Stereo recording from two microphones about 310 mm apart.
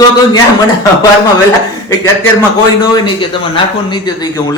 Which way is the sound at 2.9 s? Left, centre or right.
Centre.